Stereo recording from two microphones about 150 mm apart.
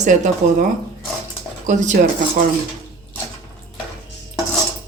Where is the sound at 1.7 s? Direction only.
55° right (ahead or behind).